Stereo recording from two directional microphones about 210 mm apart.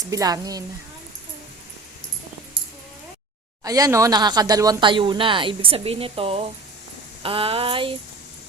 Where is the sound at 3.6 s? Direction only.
15° right (ahead or behind).